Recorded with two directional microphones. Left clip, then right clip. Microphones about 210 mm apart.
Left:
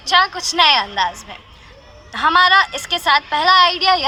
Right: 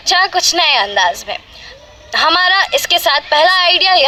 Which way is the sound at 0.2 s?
65° right (ahead or behind).